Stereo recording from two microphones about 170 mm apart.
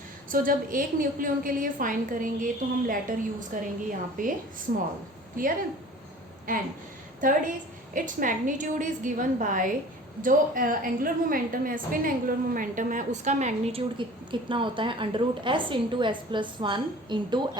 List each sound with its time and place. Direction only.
0.3 s a woman's voice: 55° right (ahead or behind)
6.5 s a woman's voice: 50° right (ahead or behind)
14.3 s a woman's voice: 30° right (ahead or behind)